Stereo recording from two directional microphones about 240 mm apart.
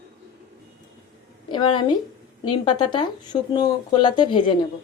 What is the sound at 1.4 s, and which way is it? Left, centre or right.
A woman's voice, left.